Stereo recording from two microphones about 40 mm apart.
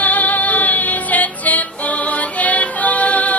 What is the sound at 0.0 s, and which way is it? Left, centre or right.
Music, left.